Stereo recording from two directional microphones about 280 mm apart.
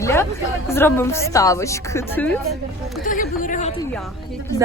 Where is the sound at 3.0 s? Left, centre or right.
Left.